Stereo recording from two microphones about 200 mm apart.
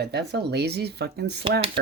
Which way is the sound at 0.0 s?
55° right (ahead or behind).